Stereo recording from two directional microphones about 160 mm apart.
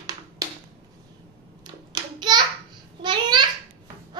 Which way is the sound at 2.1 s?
25° right (ahead or behind).